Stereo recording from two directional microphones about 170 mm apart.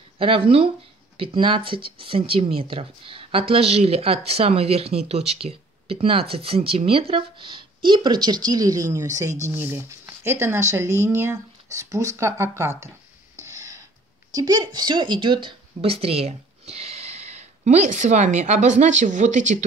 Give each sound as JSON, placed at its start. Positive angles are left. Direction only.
{"t": 0.2, "sound": "speech", "side_deg": -35}
{"t": 13.4, "sound": "a sound", "side_deg": -20}
{"t": 14.3, "sound": "speech", "side_deg": -25}